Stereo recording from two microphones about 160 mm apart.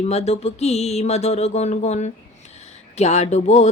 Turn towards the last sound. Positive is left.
turn(degrees=45)  # may be behind; listen again after turning